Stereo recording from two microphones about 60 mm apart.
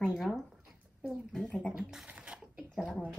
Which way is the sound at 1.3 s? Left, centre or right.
Centre.